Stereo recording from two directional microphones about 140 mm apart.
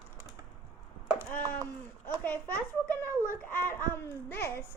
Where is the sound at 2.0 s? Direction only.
10° left (ahead or behind).